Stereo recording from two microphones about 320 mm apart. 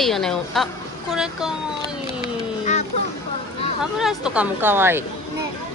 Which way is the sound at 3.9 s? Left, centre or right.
Centre.